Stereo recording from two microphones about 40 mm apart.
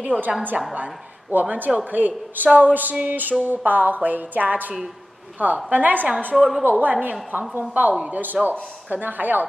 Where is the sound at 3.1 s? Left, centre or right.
Right.